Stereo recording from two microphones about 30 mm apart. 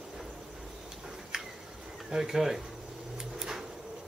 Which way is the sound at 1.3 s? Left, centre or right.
Right.